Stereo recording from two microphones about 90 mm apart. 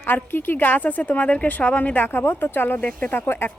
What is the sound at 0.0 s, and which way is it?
A woman's voice, 25° left (ahead or behind).